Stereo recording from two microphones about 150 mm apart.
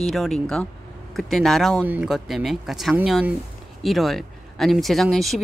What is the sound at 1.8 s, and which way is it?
Speech, 10° right (ahead or behind).